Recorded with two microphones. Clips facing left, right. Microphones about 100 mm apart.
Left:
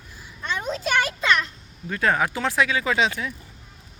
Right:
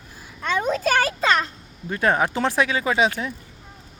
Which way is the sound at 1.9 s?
25° right (ahead or behind).